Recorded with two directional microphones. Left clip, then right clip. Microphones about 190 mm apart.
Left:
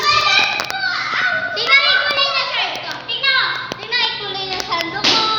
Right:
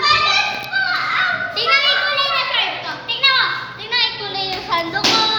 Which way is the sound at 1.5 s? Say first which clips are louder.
Left 4 dB; 25° left (ahead or behind).